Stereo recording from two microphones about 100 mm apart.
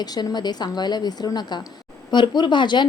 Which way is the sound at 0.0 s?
40° left (ahead or behind).